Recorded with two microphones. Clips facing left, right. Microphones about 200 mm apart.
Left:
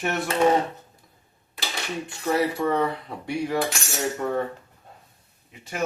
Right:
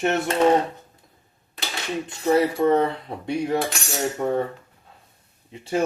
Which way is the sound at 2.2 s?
20° right (ahead or behind).